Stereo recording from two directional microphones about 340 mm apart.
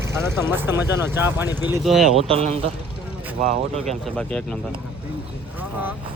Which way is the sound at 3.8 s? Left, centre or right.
Centre.